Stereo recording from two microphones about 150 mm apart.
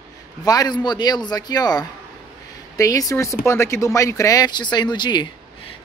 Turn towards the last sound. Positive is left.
turn(degrees=30)  # may be behind; listen again after turning